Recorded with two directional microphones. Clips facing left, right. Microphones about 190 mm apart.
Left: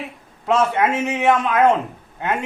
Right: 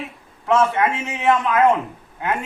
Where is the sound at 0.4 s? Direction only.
20° left (ahead or behind).